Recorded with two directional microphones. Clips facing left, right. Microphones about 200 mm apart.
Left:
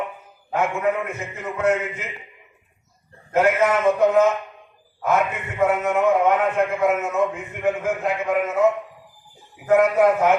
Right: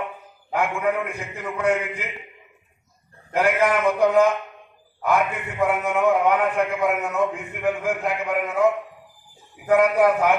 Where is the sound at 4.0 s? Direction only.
5° left (ahead or behind).